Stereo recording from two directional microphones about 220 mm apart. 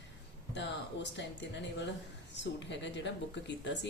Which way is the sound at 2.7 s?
55° left (ahead or behind).